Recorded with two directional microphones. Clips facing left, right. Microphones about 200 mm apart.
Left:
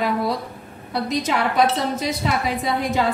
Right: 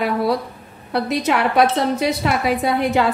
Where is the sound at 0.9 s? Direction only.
65° right (ahead or behind).